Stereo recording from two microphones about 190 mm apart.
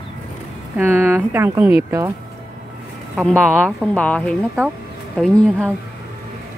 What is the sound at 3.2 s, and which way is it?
Speech, centre (ahead or behind).